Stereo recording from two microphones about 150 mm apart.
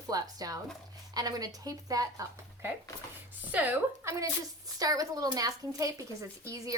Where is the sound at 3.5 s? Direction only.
10° right (ahead or behind).